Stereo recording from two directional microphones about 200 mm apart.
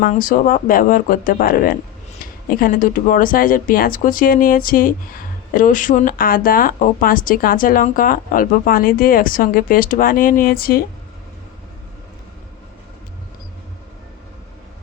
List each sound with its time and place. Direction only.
0.0 s speech: 45° left (ahead or behind)